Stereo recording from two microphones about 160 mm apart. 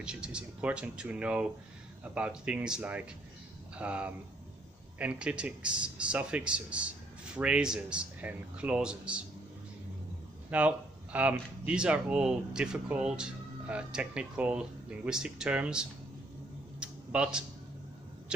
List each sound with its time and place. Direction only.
0.0 s speech: 5° right (ahead or behind)
10.5 s speech: 10° right (ahead or behind)
16.8 s a sound: 5° right (ahead or behind)